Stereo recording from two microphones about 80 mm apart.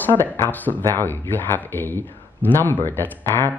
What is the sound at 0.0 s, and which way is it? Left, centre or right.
Speech, left.